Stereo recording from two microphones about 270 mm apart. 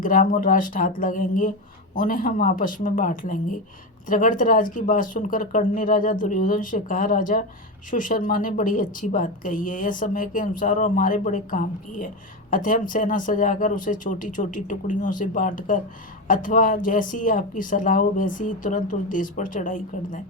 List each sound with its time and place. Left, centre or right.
0.0 s a woman's voice: left